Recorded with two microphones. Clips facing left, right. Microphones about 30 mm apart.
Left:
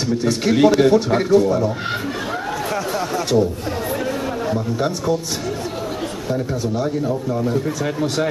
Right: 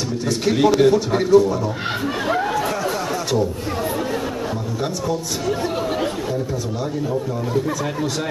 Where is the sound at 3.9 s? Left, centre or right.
Centre.